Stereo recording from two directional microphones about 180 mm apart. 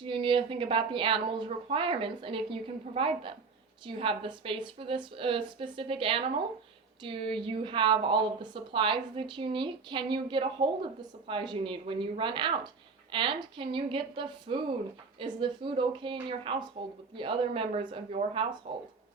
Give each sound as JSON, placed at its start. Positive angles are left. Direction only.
{"t": 0.0, "sound": "a woman's voice", "side_deg": -25}